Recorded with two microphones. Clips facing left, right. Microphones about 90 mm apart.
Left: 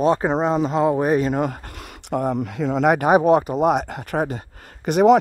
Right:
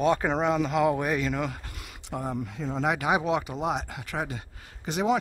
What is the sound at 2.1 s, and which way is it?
Speech, 60° left (ahead or behind).